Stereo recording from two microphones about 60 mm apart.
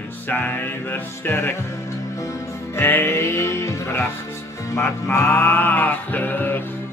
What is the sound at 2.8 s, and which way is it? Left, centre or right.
Music, left.